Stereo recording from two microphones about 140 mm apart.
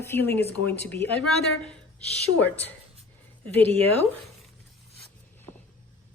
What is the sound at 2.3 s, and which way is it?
Speech, 45° right (ahead or behind).